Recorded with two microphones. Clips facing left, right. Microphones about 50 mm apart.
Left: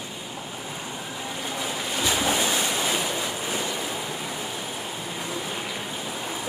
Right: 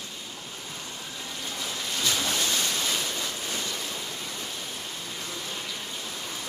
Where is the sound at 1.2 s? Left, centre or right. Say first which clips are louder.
Left 5 dB; centre.